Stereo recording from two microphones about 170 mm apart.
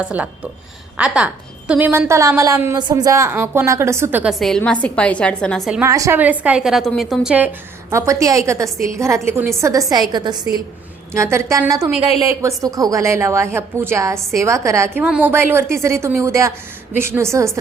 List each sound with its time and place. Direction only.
0.0 s a woman's voice: 10° right (ahead or behind)
5.8 s a woman's voice: 15° right (ahead or behind)